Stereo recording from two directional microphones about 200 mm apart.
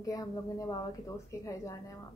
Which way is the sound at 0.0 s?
15° left (ahead or behind).